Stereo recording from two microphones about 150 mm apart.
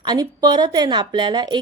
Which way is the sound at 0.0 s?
25° right (ahead or behind).